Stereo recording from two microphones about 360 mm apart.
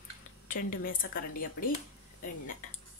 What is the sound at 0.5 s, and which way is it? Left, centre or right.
A woman's voice, left.